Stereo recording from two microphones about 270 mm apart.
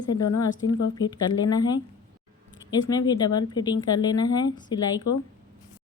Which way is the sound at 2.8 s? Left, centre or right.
Centre.